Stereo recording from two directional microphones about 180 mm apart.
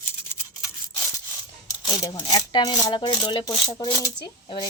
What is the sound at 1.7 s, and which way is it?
Speech, 20° left (ahead or behind).